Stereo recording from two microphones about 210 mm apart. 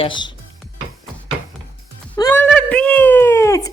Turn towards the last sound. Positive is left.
turn(degrees=15)  # may be behind; listen again after turning